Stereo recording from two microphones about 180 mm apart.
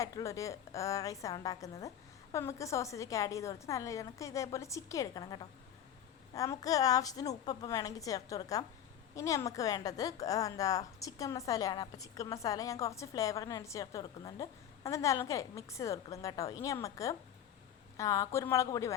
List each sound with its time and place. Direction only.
0.0 s a woman's voice: 15° left (ahead or behind)